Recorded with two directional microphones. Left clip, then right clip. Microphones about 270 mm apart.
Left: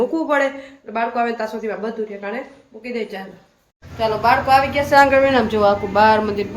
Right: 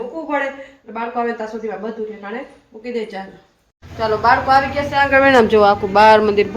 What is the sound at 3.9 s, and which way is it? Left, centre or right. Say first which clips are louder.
A man's voice: right 2 dB; centre.